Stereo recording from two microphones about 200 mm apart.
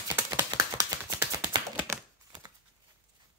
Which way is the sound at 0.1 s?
15° right (ahead or behind).